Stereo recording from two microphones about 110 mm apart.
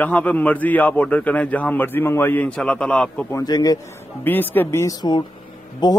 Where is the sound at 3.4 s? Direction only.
40° left (ahead or behind).